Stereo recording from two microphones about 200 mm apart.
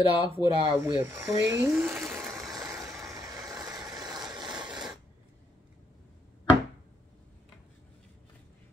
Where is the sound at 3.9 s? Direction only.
20° right (ahead or behind).